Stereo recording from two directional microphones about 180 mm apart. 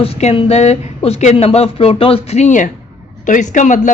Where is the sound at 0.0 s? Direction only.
35° left (ahead or behind).